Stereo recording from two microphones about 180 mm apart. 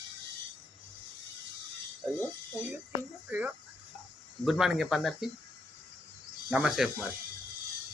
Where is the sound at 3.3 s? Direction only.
10° right (ahead or behind).